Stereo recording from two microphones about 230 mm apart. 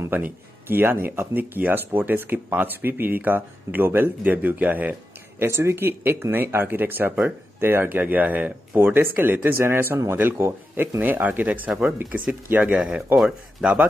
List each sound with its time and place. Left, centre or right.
0.0 s speech: centre